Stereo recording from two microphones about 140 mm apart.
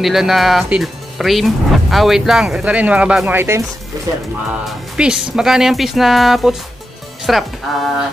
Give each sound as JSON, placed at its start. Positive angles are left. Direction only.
{"t": 0.0, "sound": "speech", "side_deg": 0}
{"t": 4.6, "sound": "speech", "side_deg": -5}